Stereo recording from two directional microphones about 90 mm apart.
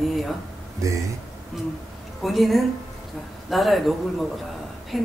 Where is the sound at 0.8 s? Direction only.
35° right (ahead or behind).